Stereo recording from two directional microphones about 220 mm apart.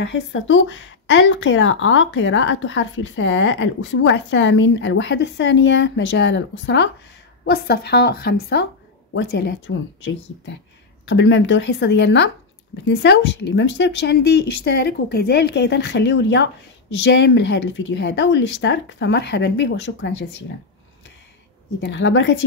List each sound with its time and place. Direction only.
0.0 s speech: 55° left (ahead or behind)
11.1 s speech: 55° left (ahead or behind)
21.8 s speech: 55° left (ahead or behind)